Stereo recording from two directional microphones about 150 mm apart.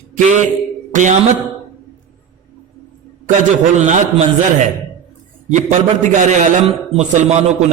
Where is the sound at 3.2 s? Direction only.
55° right (ahead or behind).